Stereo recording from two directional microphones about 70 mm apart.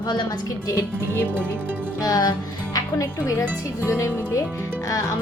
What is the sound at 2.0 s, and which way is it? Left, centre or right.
Speech, left.